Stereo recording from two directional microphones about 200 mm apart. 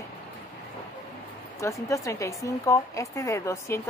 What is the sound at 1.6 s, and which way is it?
A woman's voice, 15° left (ahead or behind).